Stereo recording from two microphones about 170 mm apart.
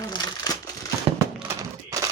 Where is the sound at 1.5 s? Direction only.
20° right (ahead or behind).